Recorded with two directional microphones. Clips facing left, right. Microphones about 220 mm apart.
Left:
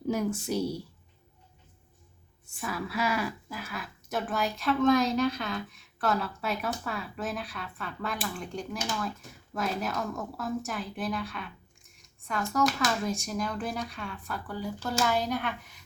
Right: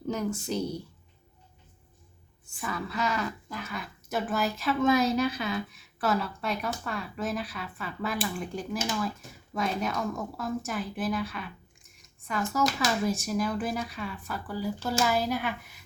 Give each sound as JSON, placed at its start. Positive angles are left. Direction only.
{"t": 0.1, "sound": "a woman's voice", "side_deg": 10}
{"t": 2.6, "sound": "speech", "side_deg": 5}